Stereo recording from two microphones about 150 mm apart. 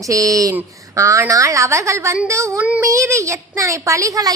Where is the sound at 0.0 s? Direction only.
20° right (ahead or behind).